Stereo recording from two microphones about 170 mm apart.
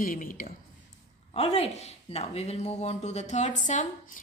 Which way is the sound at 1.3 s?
35° left (ahead or behind).